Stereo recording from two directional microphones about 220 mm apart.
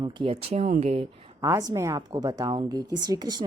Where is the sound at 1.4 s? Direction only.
15° right (ahead or behind).